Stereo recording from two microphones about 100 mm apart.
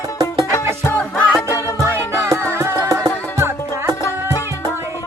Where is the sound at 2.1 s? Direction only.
30° right (ahead or behind).